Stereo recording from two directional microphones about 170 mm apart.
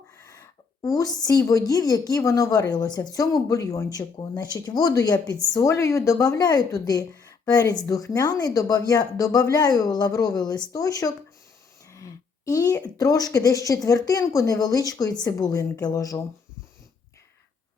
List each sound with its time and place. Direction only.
0.3 s a woman's voice: 20° left (ahead or behind)